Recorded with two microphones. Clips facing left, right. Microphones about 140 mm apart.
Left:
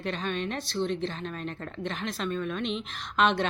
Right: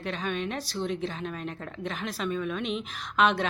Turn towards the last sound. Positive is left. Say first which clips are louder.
# even
turn(degrees=-5)  # may be behind; listen again after turning